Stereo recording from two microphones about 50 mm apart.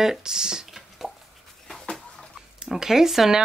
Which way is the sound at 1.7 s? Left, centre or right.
Centre.